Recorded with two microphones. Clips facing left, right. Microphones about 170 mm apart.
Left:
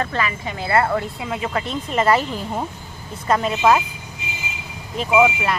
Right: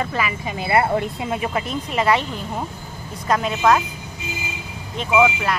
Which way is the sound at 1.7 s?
Centre (ahead or behind).